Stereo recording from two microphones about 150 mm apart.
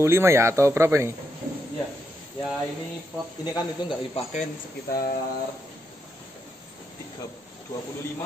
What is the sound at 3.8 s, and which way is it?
Speech, 30° left (ahead or behind).